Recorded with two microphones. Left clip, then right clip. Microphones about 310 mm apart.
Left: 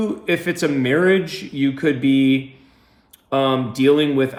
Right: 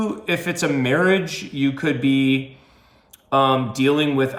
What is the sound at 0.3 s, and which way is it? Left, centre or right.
Speech, centre.